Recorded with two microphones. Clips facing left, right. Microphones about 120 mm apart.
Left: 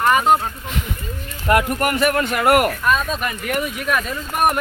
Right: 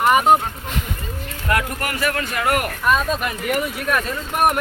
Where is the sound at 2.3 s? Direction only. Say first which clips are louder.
Left 6 dB; 55° left (ahead or behind).